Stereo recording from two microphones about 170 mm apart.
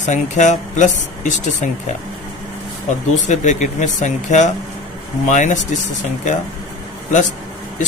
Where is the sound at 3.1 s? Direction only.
45° left (ahead or behind).